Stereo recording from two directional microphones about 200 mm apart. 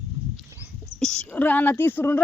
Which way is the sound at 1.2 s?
10° left (ahead or behind).